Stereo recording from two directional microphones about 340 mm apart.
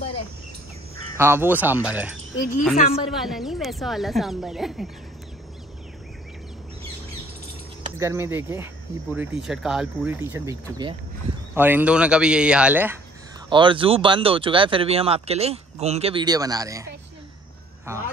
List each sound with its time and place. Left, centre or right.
1.1 s speech: centre
2.7 s a woman's voice: left
3.2 s speech: centre
8.0 s speech: centre
17.9 s speech: centre